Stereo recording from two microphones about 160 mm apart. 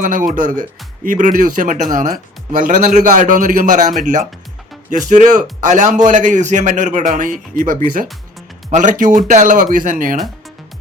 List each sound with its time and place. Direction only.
0.0 s a man's voice: 55° right (ahead or behind)